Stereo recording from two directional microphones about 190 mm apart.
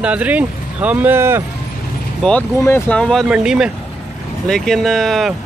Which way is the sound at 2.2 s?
10° left (ahead or behind).